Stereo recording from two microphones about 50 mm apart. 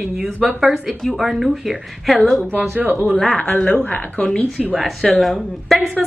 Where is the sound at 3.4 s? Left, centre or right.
Left.